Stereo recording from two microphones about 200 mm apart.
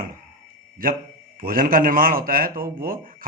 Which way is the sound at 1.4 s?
45° right (ahead or behind).